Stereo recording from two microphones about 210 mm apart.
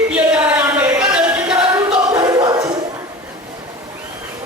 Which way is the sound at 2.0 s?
20° right (ahead or behind).